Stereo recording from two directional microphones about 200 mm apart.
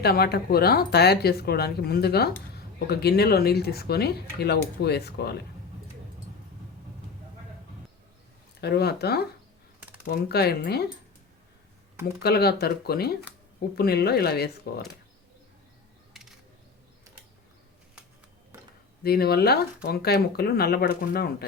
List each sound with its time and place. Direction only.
0.0 s speech: 50° left (ahead or behind)
8.6 s speech: 55° left (ahead or behind)
9.8 s typing: 5° right (ahead or behind)
10.1 s speech: 50° left (ahead or behind)
12.2 s speech: 50° left (ahead or behind)
19.0 s speech: 50° left (ahead or behind)